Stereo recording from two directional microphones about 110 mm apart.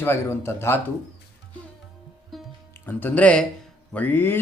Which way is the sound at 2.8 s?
15° left (ahead or behind).